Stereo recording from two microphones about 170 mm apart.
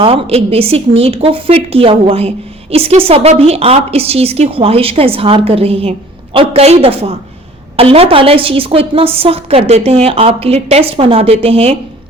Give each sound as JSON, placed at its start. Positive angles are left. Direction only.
{"t": 0.0, "sound": "speech", "side_deg": -35}